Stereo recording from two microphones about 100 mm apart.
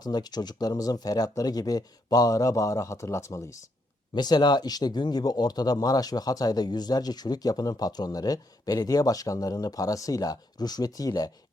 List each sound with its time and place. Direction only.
0.0 s speech: 45° left (ahead or behind)
4.1 s speech: 45° left (ahead or behind)